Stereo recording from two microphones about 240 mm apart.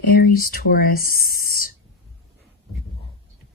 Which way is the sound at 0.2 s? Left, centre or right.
Left.